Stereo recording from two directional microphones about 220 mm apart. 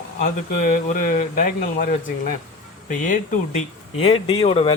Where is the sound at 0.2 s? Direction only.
35° left (ahead or behind).